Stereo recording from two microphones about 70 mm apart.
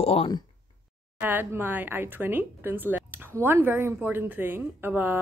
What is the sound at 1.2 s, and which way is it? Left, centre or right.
A woman's voice, right.